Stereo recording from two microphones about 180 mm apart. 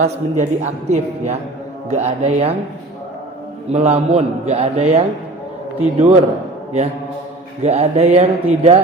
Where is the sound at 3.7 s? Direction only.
40° right (ahead or behind).